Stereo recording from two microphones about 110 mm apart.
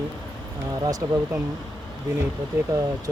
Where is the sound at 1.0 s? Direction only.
30° right (ahead or behind).